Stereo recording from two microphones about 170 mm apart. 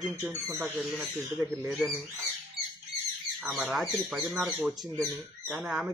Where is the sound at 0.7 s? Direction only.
5° right (ahead or behind).